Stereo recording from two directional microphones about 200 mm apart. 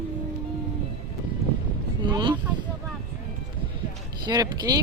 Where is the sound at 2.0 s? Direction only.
25° right (ahead or behind).